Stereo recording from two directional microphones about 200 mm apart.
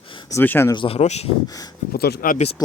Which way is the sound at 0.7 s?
30° left (ahead or behind).